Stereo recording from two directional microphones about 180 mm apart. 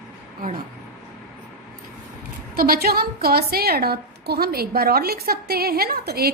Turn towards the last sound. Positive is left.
turn(degrees=-60)  # may be behind; listen again after turning